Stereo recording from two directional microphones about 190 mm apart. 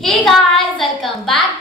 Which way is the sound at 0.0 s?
Centre (ahead or behind).